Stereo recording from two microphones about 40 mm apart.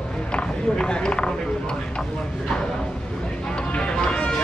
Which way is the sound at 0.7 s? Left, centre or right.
Left.